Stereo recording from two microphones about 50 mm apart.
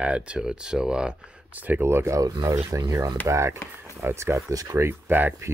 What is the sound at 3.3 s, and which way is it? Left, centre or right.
Speech, right.